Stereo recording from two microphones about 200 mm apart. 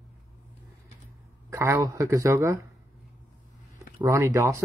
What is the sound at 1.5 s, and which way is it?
Speech, 15° right (ahead or behind).